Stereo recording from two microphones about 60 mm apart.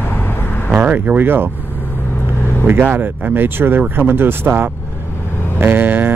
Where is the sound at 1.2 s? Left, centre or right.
Right.